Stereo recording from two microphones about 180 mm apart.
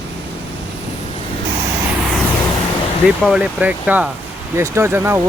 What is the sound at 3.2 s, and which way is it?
Speech, 5° right (ahead or behind).